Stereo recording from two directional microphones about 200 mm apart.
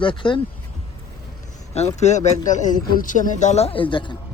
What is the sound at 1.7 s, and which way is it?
Speech, 35° left (ahead or behind).